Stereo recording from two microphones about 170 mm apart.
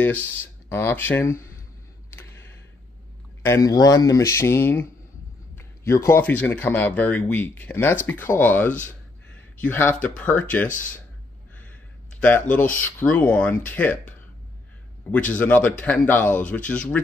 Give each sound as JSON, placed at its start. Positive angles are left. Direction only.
{"t": 0.3, "sound": "speech", "side_deg": 10}
{"t": 2.0, "sound": "a sound", "side_deg": 15}
{"t": 3.4, "sound": "speech", "side_deg": 20}
{"t": 11.5, "sound": "a sound", "side_deg": 10}
{"t": 12.7, "sound": "speech", "side_deg": 10}
{"t": 15.0, "sound": "speech", "side_deg": 10}